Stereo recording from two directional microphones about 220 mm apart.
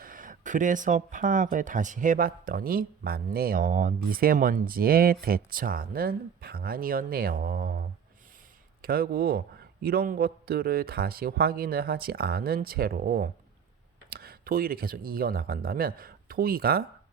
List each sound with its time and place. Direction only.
0.0 s a man's voice: 40° right (ahead or behind)